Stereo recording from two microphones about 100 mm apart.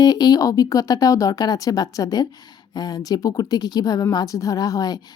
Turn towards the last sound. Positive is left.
turn(degrees=40)  # may be behind; listen again after turning